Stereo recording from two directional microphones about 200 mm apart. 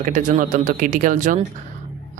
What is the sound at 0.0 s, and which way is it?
Speech, 40° right (ahead or behind).